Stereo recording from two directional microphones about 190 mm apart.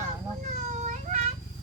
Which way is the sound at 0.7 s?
40° right (ahead or behind).